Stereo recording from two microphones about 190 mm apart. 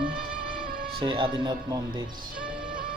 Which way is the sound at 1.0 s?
25° right (ahead or behind).